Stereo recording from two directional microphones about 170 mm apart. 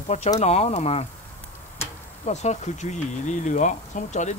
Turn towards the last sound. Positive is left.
turn(degrees=45)  # may be behind; listen again after turning